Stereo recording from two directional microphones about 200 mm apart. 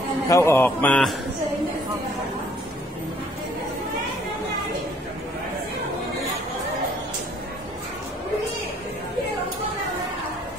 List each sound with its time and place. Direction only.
0.3 s speech: 15° left (ahead or behind)